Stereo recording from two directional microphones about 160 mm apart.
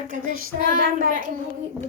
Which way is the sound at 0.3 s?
65° right (ahead or behind).